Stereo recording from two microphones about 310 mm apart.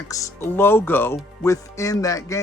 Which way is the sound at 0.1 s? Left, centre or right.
Centre.